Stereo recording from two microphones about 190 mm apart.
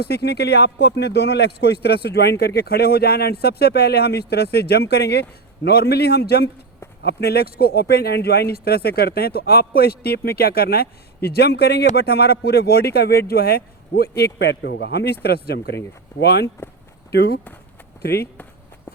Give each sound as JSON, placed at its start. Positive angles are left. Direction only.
{"t": 0.0, "sound": "a man's voice", "side_deg": 60}